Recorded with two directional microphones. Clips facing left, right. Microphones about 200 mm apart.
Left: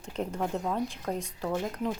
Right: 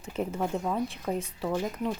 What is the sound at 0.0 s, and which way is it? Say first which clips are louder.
Speech: right 1 dB; 5° right (ahead or behind).